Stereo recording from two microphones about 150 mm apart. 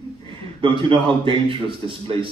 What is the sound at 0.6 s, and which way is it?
Speech, 35° right (ahead or behind).